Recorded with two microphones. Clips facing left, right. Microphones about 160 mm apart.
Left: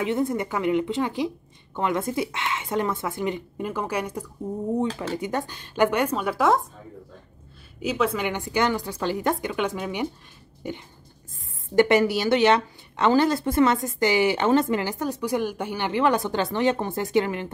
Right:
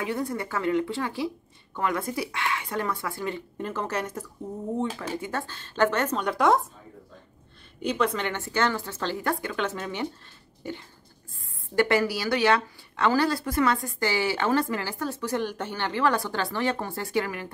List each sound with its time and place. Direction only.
0.0 s a woman's voice: 20° left (ahead or behind); by 6.6 s centre (ahead or behind)
7.8 s a woman's voice: 5° left (ahead or behind); by 17.5 s 25° left (ahead or behind)